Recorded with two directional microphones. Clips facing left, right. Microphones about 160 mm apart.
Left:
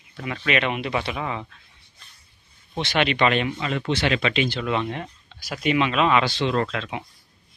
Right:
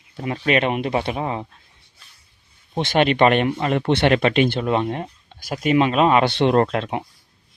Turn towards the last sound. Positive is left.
turn(degrees=-50)  # may be behind; listen again after turning